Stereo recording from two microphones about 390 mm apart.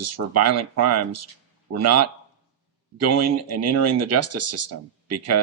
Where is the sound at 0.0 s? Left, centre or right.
Right.